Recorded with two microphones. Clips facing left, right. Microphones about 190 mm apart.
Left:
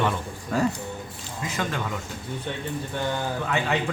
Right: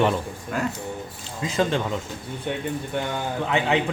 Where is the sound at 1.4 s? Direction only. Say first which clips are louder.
Right 6 dB; 30° right (ahead or behind).